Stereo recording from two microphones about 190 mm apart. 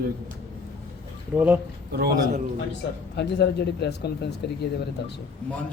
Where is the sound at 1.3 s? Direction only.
5° right (ahead or behind).